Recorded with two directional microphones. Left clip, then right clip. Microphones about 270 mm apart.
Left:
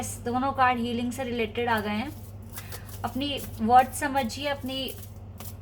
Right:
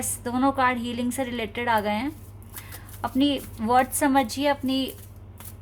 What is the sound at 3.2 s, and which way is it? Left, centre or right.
Speech, right.